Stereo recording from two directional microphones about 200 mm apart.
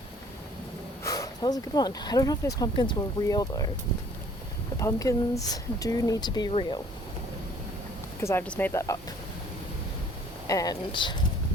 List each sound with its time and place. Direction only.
1.0 s speech: 20° left (ahead or behind)
4.8 s speech: 15° left (ahead or behind)
8.2 s speech: 10° left (ahead or behind)
10.4 s speech: 15° left (ahead or behind)